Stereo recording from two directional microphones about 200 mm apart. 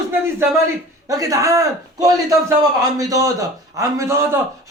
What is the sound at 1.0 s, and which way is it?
Speech, 15° right (ahead or behind).